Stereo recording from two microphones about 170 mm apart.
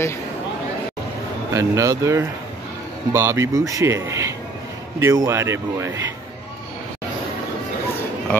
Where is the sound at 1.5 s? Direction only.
20° right (ahead or behind).